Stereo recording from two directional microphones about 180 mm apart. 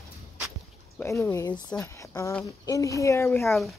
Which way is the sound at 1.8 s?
15° left (ahead or behind).